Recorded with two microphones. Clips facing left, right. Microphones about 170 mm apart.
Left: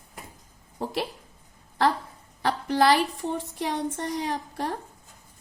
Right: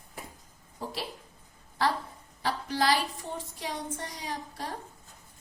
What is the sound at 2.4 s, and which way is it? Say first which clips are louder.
A woman's voice: left 6 dB; 60° left (ahead or behind).